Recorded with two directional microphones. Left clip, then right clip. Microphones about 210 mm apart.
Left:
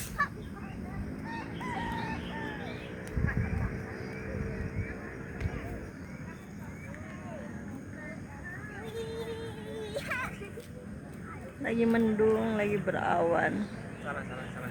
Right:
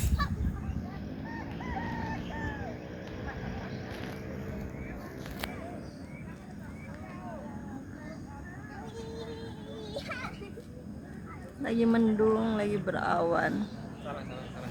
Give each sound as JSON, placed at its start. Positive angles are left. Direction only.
{"t": 1.7, "sound": "chicken", "side_deg": -35}
{"t": 9.9, "sound": "children playing", "side_deg": 15}
{"t": 11.6, "sound": "speech", "side_deg": -10}